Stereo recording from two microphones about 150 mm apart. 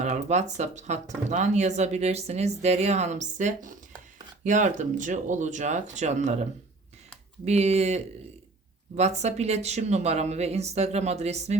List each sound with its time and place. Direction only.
0.0 s speech: 50° right (ahead or behind)